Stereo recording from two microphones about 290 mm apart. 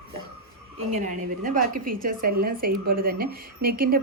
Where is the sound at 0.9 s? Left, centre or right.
Right.